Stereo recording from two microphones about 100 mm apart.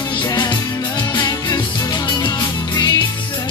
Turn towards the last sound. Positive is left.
turn(degrees=40)  # may be behind; listen again after turning